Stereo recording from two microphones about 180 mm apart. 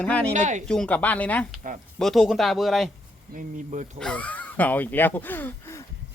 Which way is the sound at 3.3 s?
45° right (ahead or behind).